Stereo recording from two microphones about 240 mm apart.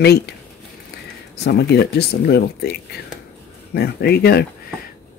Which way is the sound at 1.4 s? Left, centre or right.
Left.